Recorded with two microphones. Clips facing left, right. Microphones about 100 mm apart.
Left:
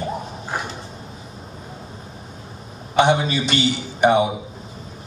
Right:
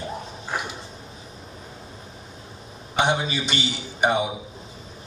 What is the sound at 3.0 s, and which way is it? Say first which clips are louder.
A man's voice: left 6 dB; centre (ahead or behind).